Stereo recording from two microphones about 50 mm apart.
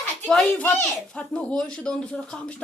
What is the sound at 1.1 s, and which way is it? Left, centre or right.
Speech, left.